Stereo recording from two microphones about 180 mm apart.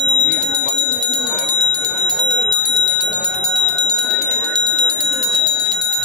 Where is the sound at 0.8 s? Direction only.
5° left (ahead or behind).